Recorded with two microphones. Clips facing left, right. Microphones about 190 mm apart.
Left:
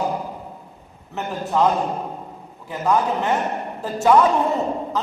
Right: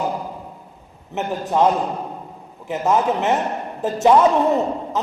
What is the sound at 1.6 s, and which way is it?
A man's voice, 20° right (ahead or behind).